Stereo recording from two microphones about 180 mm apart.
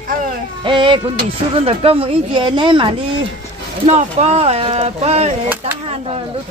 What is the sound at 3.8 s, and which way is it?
Speech, 40° right (ahead or behind).